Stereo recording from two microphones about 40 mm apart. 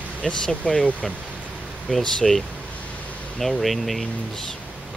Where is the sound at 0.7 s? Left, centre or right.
Centre.